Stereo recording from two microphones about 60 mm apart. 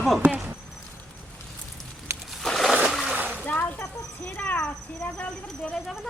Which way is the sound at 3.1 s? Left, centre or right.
Right.